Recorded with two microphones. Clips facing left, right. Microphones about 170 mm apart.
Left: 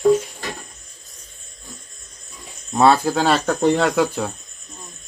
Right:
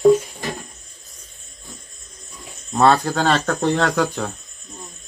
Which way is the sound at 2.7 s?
5° left (ahead or behind).